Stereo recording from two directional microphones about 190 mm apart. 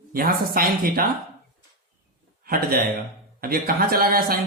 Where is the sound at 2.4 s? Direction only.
50° right (ahead or behind).